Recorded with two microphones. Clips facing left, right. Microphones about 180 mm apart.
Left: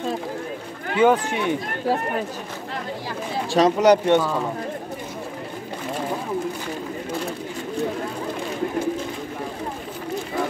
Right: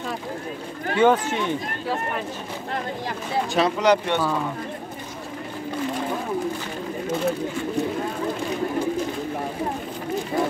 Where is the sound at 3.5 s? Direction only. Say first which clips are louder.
Left 5 dB; 40° left (ahead or behind).